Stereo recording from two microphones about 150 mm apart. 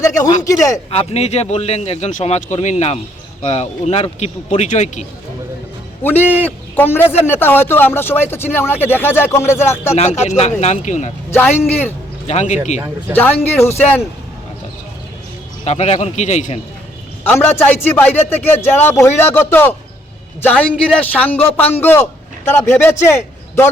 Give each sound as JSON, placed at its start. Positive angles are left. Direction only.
{"t": 0.0, "sound": "speech", "side_deg": 20}
{"t": 0.9, "sound": "speech", "side_deg": 45}
{"t": 6.0, "sound": "a man's voice", "side_deg": 15}
{"t": 6.2, "sound": "a man's voice", "side_deg": -10}
{"t": 6.7, "sound": "a man's voice", "side_deg": 15}
{"t": 9.9, "sound": "speech", "side_deg": 45}
{"t": 12.3, "sound": "speech", "side_deg": 50}
{"t": 13.1, "sound": "a man's voice", "side_deg": 10}
{"t": 15.6, "sound": "speech", "side_deg": 45}
{"t": 17.2, "sound": "a man's voice", "side_deg": 15}